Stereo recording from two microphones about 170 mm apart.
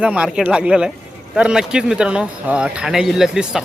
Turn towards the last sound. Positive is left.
turn(degrees=-5)  # may be behind; listen again after turning